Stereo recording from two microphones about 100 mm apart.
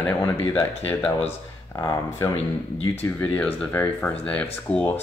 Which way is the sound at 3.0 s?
20° left (ahead or behind).